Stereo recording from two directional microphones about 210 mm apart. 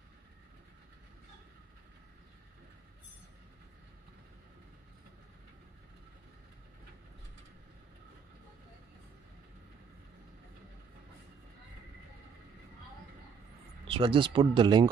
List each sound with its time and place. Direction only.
13.8 s speech: 25° right (ahead or behind)